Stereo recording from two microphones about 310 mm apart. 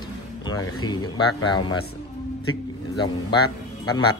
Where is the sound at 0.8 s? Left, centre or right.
Centre.